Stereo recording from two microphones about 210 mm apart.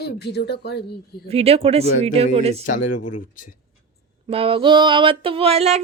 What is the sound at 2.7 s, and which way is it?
Speech, 40° left (ahead or behind).